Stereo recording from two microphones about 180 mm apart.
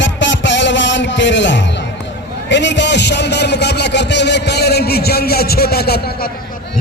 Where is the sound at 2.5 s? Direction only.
80° left; by 6.2 s 60° left (ahead or behind).